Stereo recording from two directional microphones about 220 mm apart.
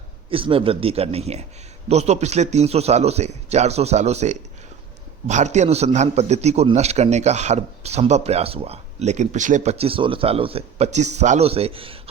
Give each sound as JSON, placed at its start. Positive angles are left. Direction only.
{"t": 0.3, "sound": "a man's voice", "side_deg": -25}